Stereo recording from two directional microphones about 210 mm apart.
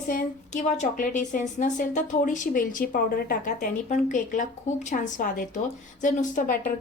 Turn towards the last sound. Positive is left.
turn(degrees=40)  # may be behind; listen again after turning